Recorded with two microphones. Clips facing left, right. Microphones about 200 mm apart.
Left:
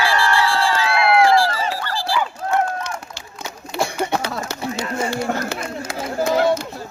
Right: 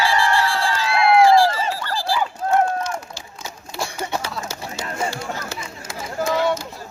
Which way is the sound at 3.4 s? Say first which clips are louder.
Left 6 dB; 60° left (ahead or behind).